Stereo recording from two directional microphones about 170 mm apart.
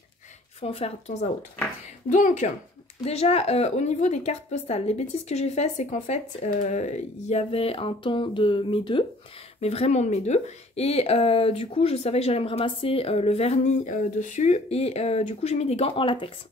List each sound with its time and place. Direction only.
0.6 s speech: 35° left (ahead or behind)
2.0 s a woman's voice: 50° left (ahead or behind)
3.0 s speech: 35° left (ahead or behind)